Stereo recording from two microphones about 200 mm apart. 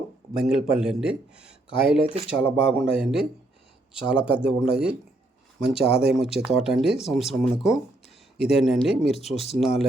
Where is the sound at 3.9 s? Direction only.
5° right (ahead or behind).